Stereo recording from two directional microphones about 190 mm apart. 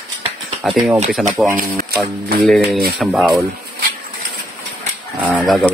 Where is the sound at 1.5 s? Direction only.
50° right (ahead or behind).